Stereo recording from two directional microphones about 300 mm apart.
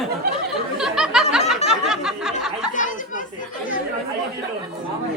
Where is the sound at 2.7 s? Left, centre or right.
Left.